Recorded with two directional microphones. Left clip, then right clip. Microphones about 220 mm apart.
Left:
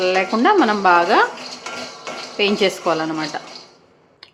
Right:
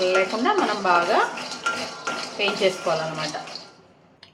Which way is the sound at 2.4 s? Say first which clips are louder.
Left 6 dB; 40° left (ahead or behind).